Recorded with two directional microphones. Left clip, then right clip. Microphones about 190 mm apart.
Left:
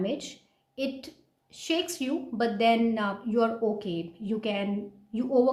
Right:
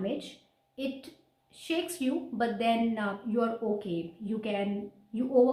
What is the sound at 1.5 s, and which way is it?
A woman's voice, 45° left (ahead or behind).